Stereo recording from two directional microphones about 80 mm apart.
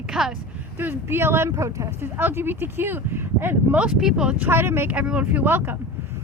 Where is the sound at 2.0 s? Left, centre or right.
Right.